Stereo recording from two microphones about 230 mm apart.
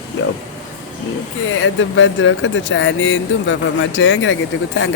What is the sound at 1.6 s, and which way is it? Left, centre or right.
Speech, left.